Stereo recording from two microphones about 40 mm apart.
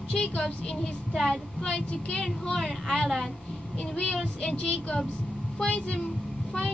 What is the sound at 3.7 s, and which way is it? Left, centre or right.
A woman's voice, left.